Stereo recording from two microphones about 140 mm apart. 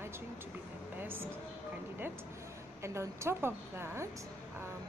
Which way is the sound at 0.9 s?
15° right (ahead or behind).